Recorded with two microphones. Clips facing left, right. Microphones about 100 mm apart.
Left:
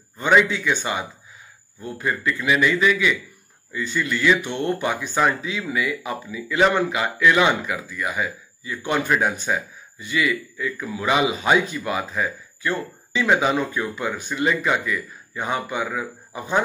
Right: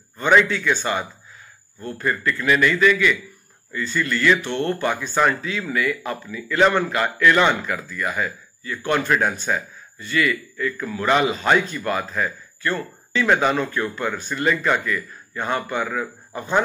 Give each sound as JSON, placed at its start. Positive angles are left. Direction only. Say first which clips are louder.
{"t": 0.2, "sound": "speech", "louder": "right 1 dB", "side_deg": 15}